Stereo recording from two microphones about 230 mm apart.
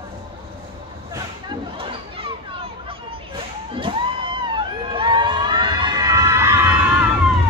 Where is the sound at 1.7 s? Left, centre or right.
Right; by 7.0 s centre.